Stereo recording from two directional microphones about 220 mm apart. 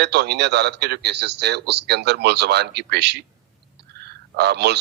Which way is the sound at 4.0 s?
50° right (ahead or behind).